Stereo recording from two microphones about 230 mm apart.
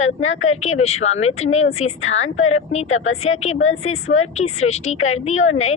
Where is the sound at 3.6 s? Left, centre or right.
Left.